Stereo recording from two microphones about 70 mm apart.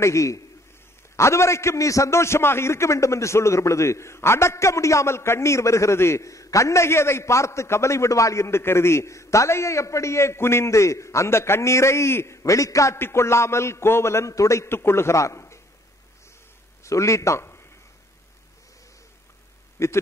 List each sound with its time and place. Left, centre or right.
0.0 s a man's voice: left
16.8 s a man's voice: left
19.8 s a man's voice: left